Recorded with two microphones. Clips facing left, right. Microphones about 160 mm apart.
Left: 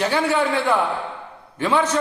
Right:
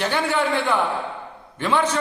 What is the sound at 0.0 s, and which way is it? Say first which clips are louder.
A man's voice: left 2 dB; 5° left (ahead or behind).